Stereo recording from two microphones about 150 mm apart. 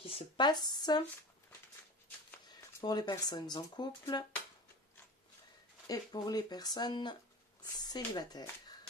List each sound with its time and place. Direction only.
0.0 s speech: 35° left (ahead or behind)
2.8 s speech: 30° left (ahead or behind)
5.9 s speech: 25° left (ahead or behind)